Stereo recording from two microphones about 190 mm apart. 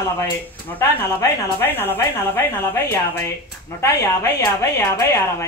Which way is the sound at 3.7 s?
15° left (ahead or behind).